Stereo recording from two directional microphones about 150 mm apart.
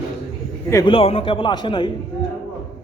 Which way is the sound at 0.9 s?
40° left (ahead or behind).